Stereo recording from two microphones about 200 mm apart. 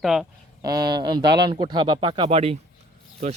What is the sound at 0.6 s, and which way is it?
Speech, 20° right (ahead or behind).